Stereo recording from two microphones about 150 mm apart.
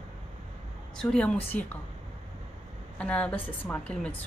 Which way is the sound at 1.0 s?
5° left (ahead or behind).